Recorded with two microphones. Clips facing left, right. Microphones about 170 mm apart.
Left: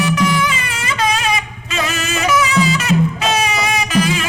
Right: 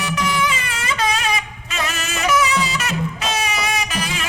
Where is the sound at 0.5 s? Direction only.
90° left.